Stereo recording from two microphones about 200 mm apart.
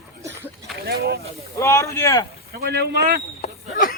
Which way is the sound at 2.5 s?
50° right (ahead or behind).